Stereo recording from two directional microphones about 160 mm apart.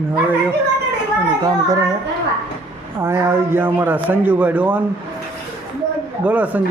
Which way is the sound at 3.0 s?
15° right (ahead or behind).